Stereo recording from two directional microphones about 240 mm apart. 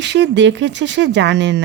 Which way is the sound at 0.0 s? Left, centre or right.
Right.